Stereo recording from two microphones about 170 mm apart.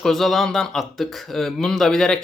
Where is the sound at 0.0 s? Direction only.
Centre (ahead or behind).